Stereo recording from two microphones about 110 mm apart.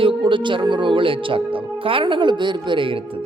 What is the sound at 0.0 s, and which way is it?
Speech, 50° right (ahead or behind).